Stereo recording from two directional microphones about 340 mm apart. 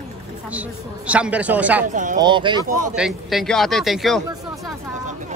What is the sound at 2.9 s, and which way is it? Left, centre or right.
Speech, centre.